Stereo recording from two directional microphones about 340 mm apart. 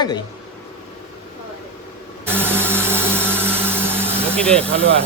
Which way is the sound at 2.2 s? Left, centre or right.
Centre.